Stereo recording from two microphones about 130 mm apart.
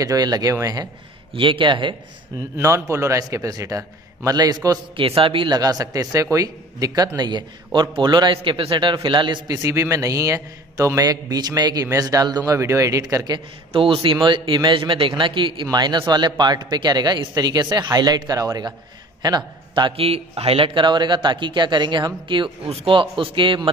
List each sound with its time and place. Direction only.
0.0 s a man's voice: 30° right (ahead or behind)
1.3 s a man's voice: 40° right (ahead or behind)
2.5 s a man's voice: 20° right (ahead or behind)
4.9 s a man's voice: 45° right (ahead or behind)
13.7 s a man's voice: 40° right (ahead or behind)
20.0 s a man's voice: 50° right (ahead or behind)